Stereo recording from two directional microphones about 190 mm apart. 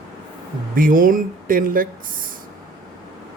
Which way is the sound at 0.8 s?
45° right (ahead or behind).